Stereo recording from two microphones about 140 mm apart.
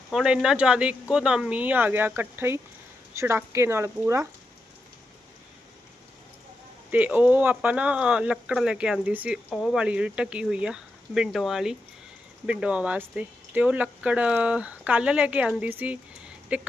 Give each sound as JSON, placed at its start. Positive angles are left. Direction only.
{"t": 0.1, "sound": "speech", "side_deg": -5}
{"t": 6.9, "sound": "speech", "side_deg": -10}
{"t": 9.5, "sound": "speech", "side_deg": 5}
{"t": 9.8, "sound": "speech", "side_deg": -10}